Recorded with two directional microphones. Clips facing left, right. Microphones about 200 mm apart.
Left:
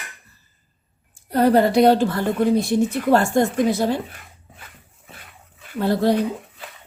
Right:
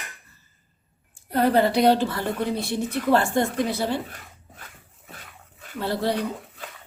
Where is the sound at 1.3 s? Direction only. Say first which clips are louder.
Left 4 dB; 45° left (ahead or behind).